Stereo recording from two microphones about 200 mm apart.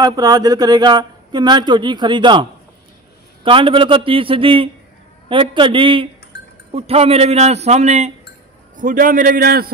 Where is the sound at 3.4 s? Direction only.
25° right (ahead or behind).